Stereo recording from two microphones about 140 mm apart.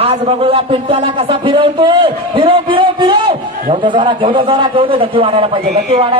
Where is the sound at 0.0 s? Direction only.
45° right (ahead or behind).